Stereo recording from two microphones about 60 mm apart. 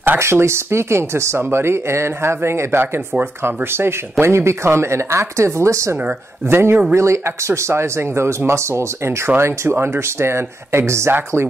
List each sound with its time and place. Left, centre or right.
0.2 s speech: right
6.5 s speech: right
11.1 s speech: right